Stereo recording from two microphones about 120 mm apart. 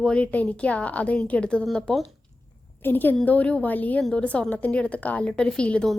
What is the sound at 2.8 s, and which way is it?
A woman's voice, 15° left (ahead or behind).